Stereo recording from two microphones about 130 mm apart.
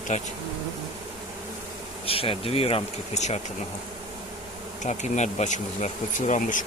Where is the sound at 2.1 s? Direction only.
45° left (ahead or behind); by 3.3 s 60° left (ahead or behind).